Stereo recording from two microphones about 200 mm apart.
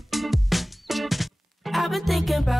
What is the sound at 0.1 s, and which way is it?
Music, centre (ahead or behind).